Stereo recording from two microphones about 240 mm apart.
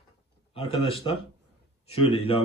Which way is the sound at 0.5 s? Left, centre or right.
Left.